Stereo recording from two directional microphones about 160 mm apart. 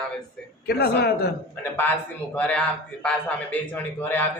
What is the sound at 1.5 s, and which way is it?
A man's voice, 10° left (ahead or behind).